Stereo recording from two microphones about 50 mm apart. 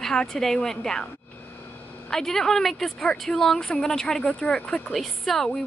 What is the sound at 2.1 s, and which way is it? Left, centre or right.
A woman's voice, centre.